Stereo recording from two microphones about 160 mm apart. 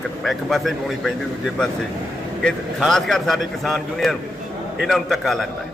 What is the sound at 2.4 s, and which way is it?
A man's voice, centre (ahead or behind).